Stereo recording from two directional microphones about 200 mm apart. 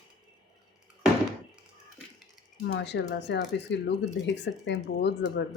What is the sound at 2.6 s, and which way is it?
Speech, 60° left (ahead or behind).